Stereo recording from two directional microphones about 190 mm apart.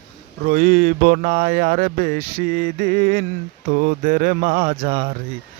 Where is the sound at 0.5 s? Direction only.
50° right (ahead or behind).